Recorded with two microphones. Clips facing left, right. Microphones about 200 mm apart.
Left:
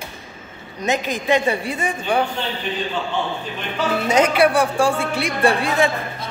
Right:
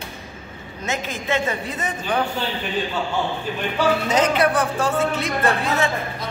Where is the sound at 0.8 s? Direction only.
15° left (ahead or behind).